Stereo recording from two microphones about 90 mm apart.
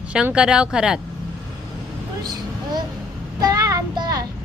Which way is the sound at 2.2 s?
50° right (ahead or behind).